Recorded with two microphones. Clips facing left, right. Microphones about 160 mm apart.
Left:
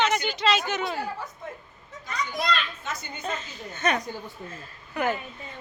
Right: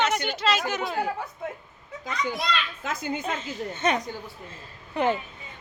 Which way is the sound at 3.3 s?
25° right (ahead or behind).